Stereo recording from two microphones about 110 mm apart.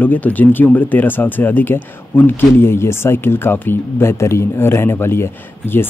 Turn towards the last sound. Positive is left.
turn(degrees=20)  # may be behind; listen again after turning